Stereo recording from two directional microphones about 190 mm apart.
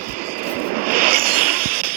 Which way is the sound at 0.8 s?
50° right (ahead or behind).